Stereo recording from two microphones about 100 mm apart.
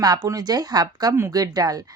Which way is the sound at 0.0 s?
40° right (ahead or behind).